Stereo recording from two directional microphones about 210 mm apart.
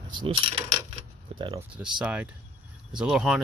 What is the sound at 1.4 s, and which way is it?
Speech, 25° right (ahead or behind).